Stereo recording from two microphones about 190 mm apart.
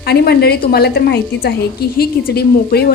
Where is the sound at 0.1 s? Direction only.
55° left (ahead or behind).